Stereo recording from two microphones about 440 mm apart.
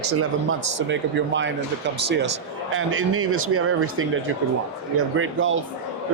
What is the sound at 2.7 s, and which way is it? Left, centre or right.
Speech, right.